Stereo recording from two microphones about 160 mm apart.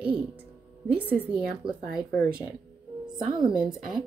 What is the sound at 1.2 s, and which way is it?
Speech, 5° right (ahead or behind).